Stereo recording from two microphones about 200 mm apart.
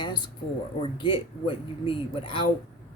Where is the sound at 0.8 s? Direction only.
25° left (ahead or behind).